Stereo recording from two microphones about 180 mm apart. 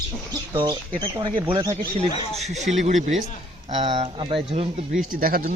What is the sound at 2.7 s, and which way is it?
Speech, 40° right (ahead or behind).